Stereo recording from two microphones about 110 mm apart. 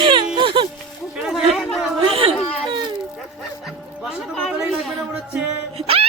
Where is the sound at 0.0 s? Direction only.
50° right (ahead or behind).